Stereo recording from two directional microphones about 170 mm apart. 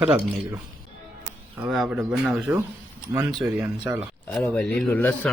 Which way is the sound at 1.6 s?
5° right (ahead or behind).